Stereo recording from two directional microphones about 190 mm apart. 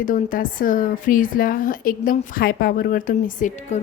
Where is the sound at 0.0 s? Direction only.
45° left (ahead or behind).